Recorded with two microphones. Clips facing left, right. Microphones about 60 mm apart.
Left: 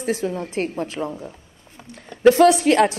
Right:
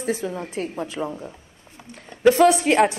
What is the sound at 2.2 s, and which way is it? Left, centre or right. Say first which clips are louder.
Speech: left 2 dB; left.